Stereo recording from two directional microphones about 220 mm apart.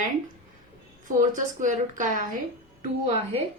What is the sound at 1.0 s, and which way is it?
A woman's voice, 35° right (ahead or behind).